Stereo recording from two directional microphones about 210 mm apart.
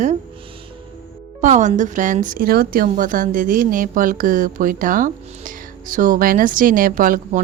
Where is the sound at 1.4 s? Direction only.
35° right (ahead or behind).